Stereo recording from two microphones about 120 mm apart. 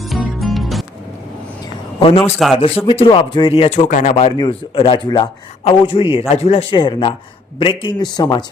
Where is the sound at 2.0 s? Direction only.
55° left (ahead or behind).